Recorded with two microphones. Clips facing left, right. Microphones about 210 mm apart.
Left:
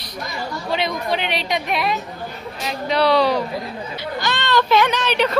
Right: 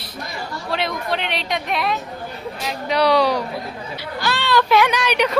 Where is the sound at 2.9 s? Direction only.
10° right (ahead or behind).